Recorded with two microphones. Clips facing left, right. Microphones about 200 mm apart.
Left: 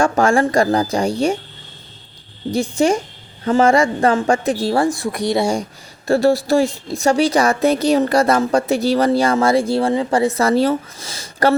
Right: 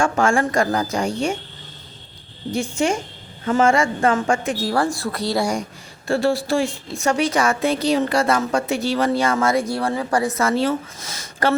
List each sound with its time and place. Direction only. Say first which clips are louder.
0.0 s a woman's voice: left 4 dB; 35° left (ahead or behind)
2.5 s a woman's voice: left 5 dB; 35° left (ahead or behind)
4.7 s speech: left 4 dB; 20° left (ahead or behind)
6.1 s a woman's voice: left 5 dB; 40° left (ahead or behind)